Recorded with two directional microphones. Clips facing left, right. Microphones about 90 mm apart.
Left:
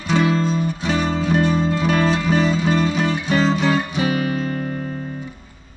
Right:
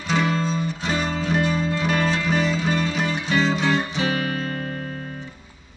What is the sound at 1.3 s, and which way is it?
Music, 30° left (ahead or behind).